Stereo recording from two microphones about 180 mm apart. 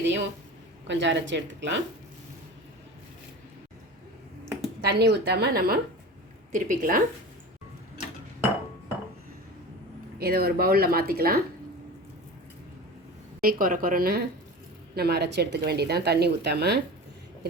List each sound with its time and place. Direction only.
0.0 s speech: 80° right
4.8 s a woman's voice: 60° right (ahead or behind)
10.2 s speech: 60° right (ahead or behind)
13.4 s a woman's voice: 50° right (ahead or behind)